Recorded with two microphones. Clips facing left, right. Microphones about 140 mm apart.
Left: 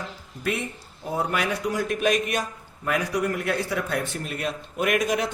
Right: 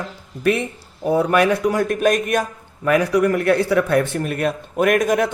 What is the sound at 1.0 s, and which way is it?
Speech, 70° right (ahead or behind).